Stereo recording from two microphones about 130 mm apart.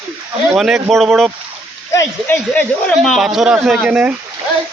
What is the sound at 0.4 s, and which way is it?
Speech, centre (ahead or behind).